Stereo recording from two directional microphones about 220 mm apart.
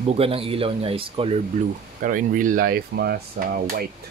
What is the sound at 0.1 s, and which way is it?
Speech, 25° right (ahead or behind).